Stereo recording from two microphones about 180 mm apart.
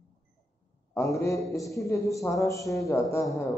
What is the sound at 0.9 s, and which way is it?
A man's voice, 15° left (ahead or behind).